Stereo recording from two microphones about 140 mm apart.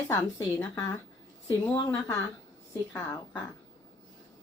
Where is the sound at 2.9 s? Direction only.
15° left (ahead or behind).